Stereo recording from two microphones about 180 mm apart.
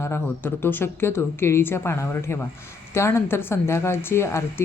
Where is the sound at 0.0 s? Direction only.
15° left (ahead or behind).